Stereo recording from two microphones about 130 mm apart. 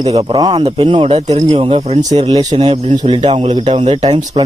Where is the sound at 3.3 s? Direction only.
55° right (ahead or behind).